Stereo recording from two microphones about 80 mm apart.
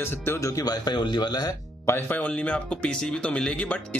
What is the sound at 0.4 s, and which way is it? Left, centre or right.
Speech, left.